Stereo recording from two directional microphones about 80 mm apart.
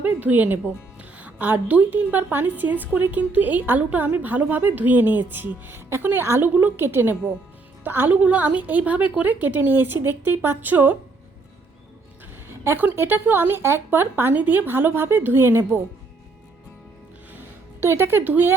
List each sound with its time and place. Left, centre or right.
0.0 s a woman's voice: right
12.5 s a woman's voice: right
17.3 s music: right